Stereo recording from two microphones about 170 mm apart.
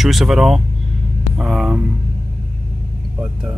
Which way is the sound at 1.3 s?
5° right (ahead or behind).